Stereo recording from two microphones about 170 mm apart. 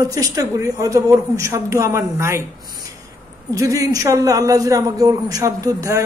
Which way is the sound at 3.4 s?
20° right (ahead or behind).